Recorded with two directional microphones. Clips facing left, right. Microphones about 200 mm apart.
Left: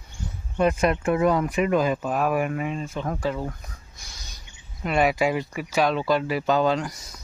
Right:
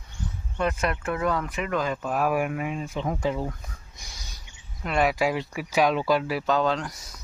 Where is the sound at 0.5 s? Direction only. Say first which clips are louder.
Left 5 dB; 15° left (ahead or behind).